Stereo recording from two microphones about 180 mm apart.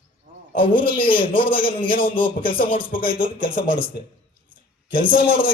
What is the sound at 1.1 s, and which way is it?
Speech, 30° left (ahead or behind).